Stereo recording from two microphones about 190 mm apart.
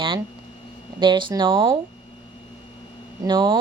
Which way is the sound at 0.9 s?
25° right (ahead or behind).